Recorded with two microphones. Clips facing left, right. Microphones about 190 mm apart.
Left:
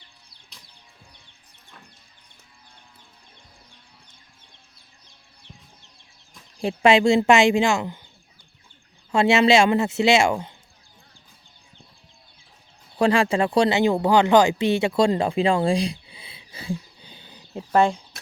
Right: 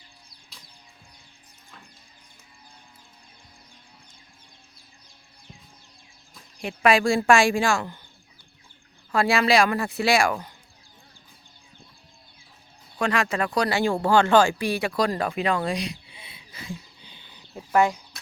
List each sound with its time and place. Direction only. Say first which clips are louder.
6.6 s speech: left 3 dB; 25° left (ahead or behind)
9.1 s speech: left 4 dB; 25° left (ahead or behind)
13.0 s speech: left 5 dB; 30° left (ahead or behind)
17.7 s speech: left 2 dB; 30° left (ahead or behind)